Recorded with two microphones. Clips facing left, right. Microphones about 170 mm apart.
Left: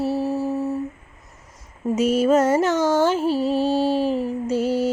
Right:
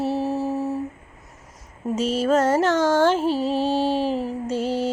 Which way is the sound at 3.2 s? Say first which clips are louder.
Left 1 dB; 40° right (ahead or behind).